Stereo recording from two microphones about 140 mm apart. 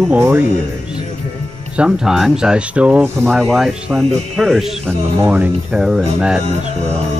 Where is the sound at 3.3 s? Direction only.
Centre (ahead or behind).